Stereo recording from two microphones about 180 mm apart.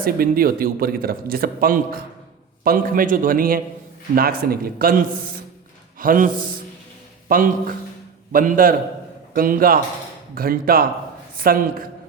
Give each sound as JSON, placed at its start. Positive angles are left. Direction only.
{"t": 0.0, "sound": "a man's voice", "side_deg": -55}